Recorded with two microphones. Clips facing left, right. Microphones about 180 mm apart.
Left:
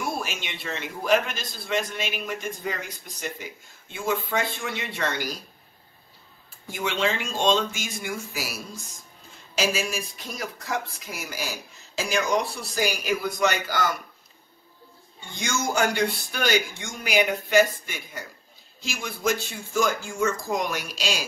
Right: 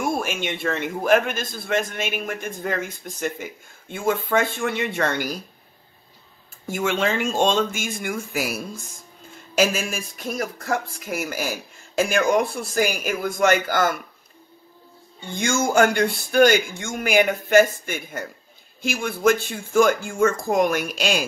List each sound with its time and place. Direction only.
0.0 s a man's voice: 50° right (ahead or behind)
6.7 s a man's voice: 50° right (ahead or behind)
15.3 s a man's voice: 50° right (ahead or behind)